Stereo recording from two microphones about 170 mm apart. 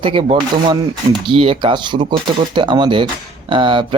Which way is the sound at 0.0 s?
30° right (ahead or behind).